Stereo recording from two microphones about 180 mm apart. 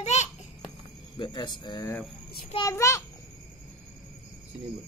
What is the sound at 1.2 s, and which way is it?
Speech, 25° left (ahead or behind).